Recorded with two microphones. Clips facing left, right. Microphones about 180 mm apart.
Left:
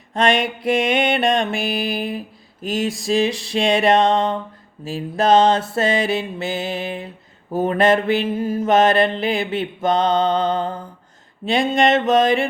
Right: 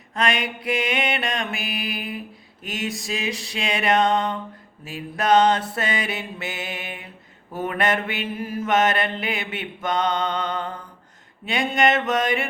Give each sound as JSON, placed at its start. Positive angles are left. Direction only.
{"t": 1.1, "sound": "music", "side_deg": 30}
{"t": 2.6, "sound": "mantra", "side_deg": 30}